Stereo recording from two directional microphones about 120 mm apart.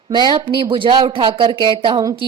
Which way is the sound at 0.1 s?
40° right (ahead or behind).